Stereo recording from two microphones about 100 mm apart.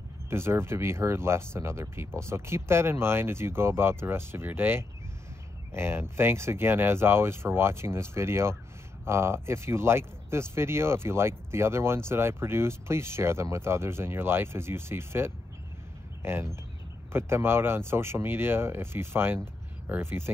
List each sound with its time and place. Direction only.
0.3 s speech: 25° right (ahead or behind)